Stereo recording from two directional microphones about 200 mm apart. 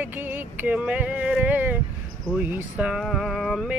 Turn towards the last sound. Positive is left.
turn(degrees=0)  # may be behind; listen again after turning